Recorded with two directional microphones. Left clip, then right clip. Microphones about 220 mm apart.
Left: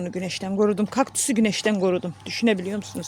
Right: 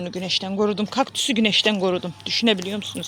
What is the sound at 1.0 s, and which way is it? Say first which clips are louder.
Speech: right 4 dB; 50° left (ahead or behind).